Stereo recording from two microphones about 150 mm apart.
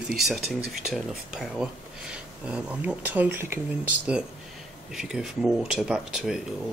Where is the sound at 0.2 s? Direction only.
Centre (ahead or behind).